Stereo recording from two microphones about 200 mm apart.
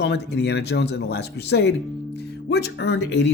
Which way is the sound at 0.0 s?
60° left (ahead or behind).